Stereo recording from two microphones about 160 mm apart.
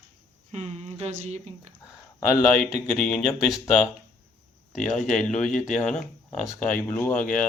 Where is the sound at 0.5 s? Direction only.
40° right (ahead or behind).